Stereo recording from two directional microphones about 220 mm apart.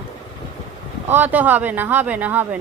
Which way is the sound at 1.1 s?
10° right (ahead or behind).